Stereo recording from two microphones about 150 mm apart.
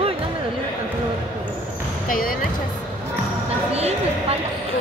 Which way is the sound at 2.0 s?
70° left (ahead or behind).